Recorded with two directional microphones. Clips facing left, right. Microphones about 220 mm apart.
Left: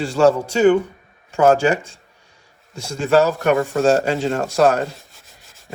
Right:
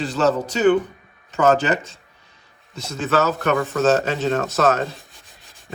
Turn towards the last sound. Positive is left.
turn(degrees=0)  # may be behind; listen again after turning